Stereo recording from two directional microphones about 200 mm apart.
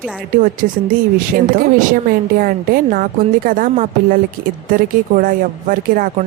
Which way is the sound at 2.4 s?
45° right (ahead or behind).